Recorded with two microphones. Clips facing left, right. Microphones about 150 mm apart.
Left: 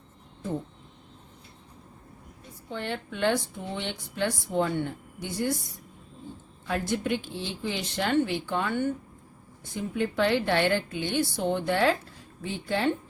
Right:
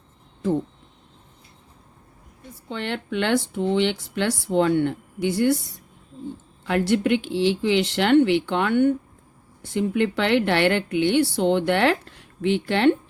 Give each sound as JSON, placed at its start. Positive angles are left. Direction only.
{"t": 2.6, "sound": "a woman's voice", "side_deg": -80}
{"t": 9.6, "sound": "a woman's voice", "side_deg": -75}